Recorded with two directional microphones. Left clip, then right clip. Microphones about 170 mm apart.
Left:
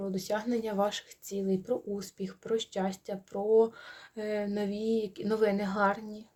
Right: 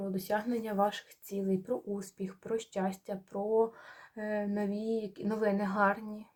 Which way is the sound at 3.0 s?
15° left (ahead or behind).